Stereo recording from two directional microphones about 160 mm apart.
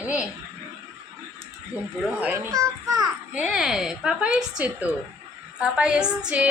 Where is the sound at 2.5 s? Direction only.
20° right (ahead or behind).